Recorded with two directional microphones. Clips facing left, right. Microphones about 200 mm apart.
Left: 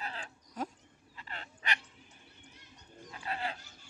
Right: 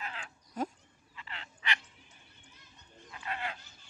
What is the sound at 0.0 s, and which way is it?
Dog, 35° left (ahead or behind).